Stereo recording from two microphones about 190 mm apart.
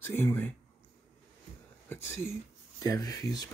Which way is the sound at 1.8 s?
15° left (ahead or behind).